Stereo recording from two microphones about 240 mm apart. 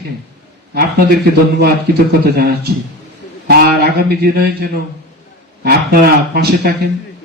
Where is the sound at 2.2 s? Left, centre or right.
Right.